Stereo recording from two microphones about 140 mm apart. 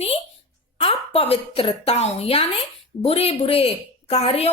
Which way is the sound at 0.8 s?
45° left (ahead or behind).